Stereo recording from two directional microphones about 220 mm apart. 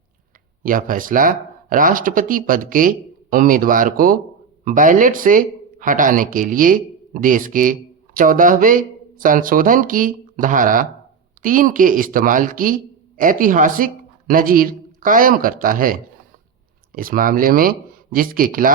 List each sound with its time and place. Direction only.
0.6 s speech: 40° right (ahead or behind)